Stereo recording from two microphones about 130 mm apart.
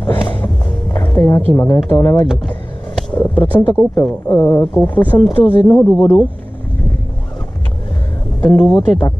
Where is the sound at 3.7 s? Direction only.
25° left (ahead or behind).